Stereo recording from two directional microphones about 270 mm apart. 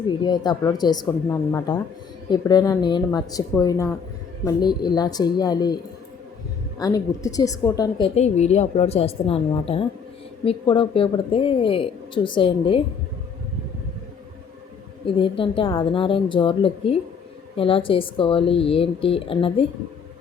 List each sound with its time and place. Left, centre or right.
0.3 s a woman's voice: centre
6.7 s a woman's voice: centre
15.0 s a woman's voice: centre